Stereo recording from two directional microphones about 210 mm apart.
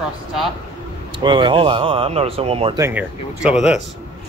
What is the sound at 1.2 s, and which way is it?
Speech, 20° right (ahead or behind).